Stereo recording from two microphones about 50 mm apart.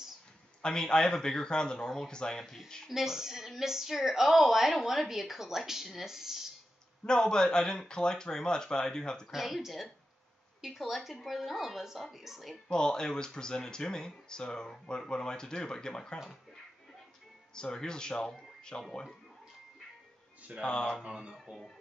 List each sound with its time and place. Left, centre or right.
0.6 s speech: centre
2.9 s a woman's voice: centre
7.1 s speech: centre
9.3 s speech: centre
12.6 s speech: centre
17.6 s speech: centre
20.6 s speech: centre
21.0 s speech: right